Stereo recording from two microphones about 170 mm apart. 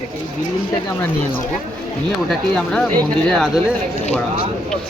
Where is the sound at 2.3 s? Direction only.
Centre (ahead or behind).